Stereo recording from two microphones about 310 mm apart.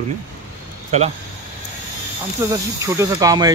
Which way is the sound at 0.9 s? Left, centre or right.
Right.